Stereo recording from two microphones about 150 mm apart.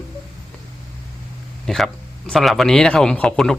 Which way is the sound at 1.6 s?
Centre (ahead or behind).